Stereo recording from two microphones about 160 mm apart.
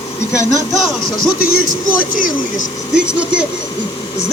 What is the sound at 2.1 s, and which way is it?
Speech, 55° left (ahead or behind).